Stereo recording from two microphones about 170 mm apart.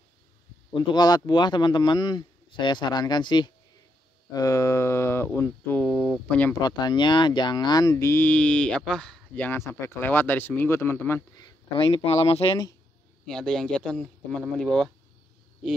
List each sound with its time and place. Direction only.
0.7 s speech: 25° left (ahead or behind); by 6.5 s 5° left (ahead or behind)
6.5 s speech: 25° left (ahead or behind)
11.7 s speech: 35° left (ahead or behind)
13.2 s speech: centre (ahead or behind)